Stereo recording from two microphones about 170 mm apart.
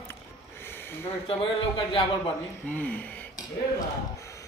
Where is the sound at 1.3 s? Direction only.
30° left (ahead or behind).